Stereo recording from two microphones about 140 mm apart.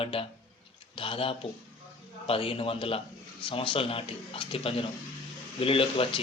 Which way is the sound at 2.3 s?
40° left (ahead or behind).